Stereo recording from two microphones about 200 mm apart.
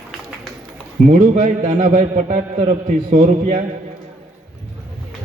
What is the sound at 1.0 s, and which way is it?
A man's voice, 40° right (ahead or behind).